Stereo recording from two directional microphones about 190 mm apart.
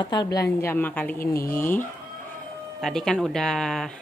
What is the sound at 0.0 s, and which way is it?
Speech, 20° left (ahead or behind).